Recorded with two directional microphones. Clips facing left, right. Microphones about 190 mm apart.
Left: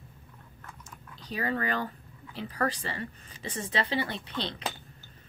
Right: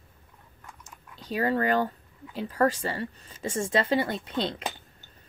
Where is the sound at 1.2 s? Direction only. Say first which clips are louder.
Right 6 dB; 45° right (ahead or behind).